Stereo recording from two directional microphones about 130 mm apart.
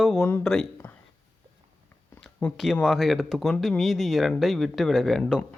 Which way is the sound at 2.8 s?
Centre (ahead or behind).